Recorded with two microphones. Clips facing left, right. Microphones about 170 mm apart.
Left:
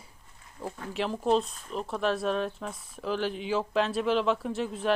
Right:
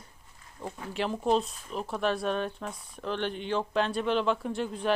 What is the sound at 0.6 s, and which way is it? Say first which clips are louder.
Speech: even; centre (ahead or behind).